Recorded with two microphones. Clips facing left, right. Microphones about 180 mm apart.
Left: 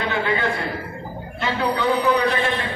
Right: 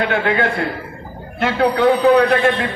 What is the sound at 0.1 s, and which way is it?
A man's voice, 65° right (ahead or behind).